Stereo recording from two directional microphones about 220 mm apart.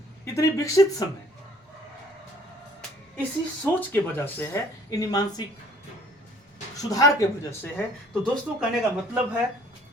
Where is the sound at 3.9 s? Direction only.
10° left (ahead or behind).